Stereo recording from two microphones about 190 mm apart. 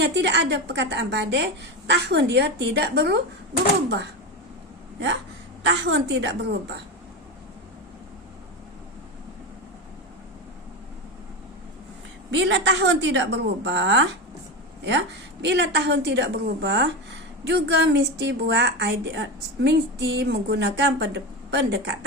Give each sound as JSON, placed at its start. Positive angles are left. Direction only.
{"t": 0.0, "sound": "a woman's voice", "side_deg": -65}
{"t": 5.6, "sound": "a woman's voice", "side_deg": -65}
{"t": 12.3, "sound": "a woman's voice", "side_deg": -70}